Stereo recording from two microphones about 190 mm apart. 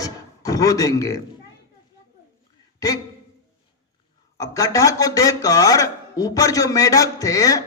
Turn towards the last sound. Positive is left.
turn(degrees=20)  # may be behind; listen again after turning